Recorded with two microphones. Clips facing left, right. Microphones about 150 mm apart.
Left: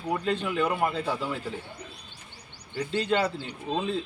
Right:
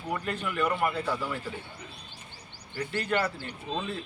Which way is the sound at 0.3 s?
25° left (ahead or behind).